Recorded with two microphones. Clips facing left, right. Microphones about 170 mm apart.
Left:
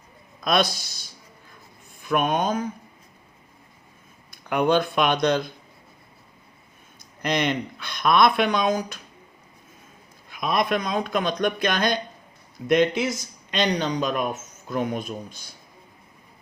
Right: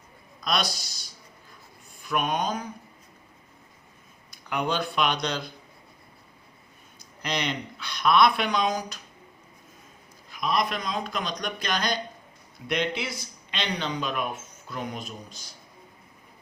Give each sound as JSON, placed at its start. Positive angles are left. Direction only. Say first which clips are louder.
{"t": 0.4, "sound": "speech", "louder": "left 6 dB", "side_deg": 50}
{"t": 4.3, "sound": "speech", "louder": "left 7 dB", "side_deg": 55}
{"t": 7.2, "sound": "speech", "louder": "left 6 dB", "side_deg": 50}
{"t": 10.2, "sound": "speech", "louder": "left 3 dB", "side_deg": 55}